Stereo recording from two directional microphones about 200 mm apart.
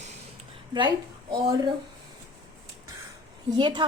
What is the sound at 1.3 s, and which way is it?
Speech, 25° right (ahead or behind).